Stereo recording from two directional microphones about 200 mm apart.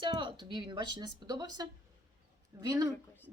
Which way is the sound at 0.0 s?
25° right (ahead or behind).